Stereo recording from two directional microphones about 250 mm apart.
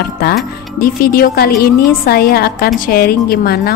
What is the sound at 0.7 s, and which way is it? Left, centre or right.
Speech, left.